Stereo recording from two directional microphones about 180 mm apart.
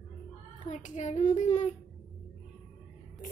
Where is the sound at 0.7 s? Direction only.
40° left (ahead or behind).